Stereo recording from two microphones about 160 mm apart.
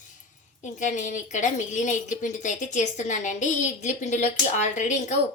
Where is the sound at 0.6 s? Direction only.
50° left (ahead or behind).